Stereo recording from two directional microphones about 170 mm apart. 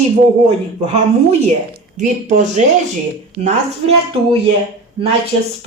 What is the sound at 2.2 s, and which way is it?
Speech, 45° right (ahead or behind).